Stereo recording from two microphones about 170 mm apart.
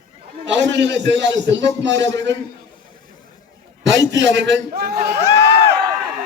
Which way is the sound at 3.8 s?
90° right.